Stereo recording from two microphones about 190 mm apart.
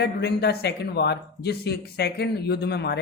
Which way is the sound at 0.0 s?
60° left (ahead or behind).